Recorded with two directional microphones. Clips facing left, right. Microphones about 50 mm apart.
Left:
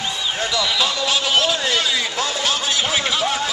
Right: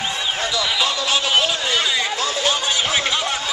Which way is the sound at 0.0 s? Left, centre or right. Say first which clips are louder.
Right 1 dB; right.